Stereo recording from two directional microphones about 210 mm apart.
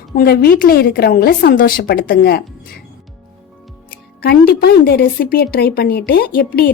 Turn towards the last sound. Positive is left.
turn(degrees=45)  # may be behind; listen again after turning